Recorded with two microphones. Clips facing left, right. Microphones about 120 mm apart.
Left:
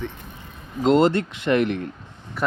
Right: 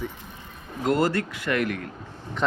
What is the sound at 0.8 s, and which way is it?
Speech, 25° left (ahead or behind).